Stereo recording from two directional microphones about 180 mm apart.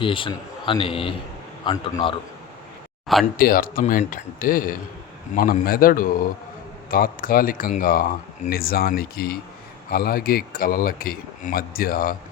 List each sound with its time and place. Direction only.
0.0 s a man's voice: 30° left (ahead or behind)
3.3 s a man's voice: 55° left (ahead or behind)